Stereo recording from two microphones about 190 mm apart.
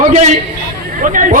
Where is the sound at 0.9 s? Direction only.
45° right (ahead or behind).